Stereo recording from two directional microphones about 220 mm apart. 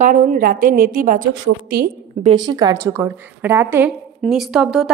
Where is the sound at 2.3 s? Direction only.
20° right (ahead or behind).